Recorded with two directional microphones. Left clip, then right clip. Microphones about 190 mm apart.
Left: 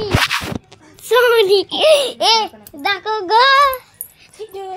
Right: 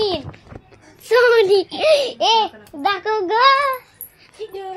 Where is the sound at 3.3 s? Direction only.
10° left (ahead or behind).